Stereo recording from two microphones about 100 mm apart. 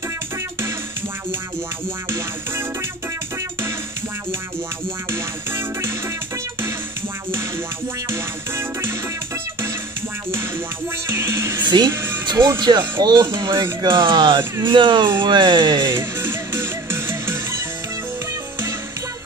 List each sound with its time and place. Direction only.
2.0 s music: 25° right (ahead or behind)
5.1 s music: 25° right (ahead or behind)
8.1 s music: 25° right (ahead or behind)
11.1 s music: 25° right (ahead or behind)
11.6 s music: 45° right (ahead or behind)
11.9 s music: 25° right (ahead or behind)
12.5 s speech: 45° right (ahead or behind)
16.0 s music: 25° right (ahead or behind)